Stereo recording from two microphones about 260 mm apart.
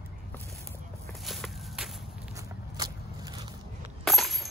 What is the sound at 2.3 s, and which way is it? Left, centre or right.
Walk, centre.